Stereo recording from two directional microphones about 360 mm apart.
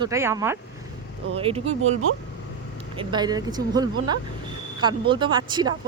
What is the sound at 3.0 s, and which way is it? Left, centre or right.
Speech, centre.